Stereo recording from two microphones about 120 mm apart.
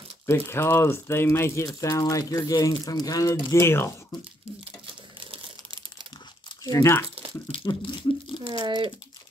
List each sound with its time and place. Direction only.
0.3 s speech: 20° left (ahead or behind)
3.5 s speech: 20° left (ahead or behind)
5.2 s crumpling: 45° right (ahead or behind)
6.6 s speech: 25° left (ahead or behind)
7.6 s speech: 40° left (ahead or behind)
8.5 s speech: 40° right (ahead or behind)